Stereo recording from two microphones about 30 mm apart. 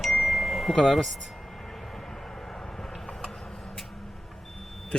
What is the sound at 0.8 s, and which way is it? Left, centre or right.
Speech, centre.